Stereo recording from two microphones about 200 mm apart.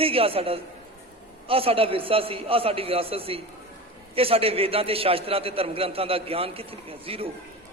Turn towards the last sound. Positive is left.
turn(degrees=-30)  # may be behind; listen again after turning